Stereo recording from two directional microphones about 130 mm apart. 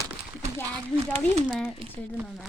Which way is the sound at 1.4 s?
5° right (ahead or behind).